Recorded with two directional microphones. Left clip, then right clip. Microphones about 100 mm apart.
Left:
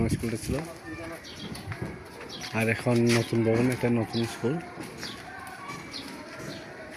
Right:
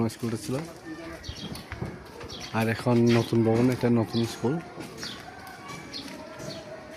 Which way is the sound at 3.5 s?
30° right (ahead or behind).